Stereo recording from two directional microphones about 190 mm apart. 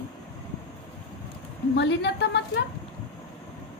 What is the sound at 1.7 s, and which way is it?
Speech, 65° left (ahead or behind).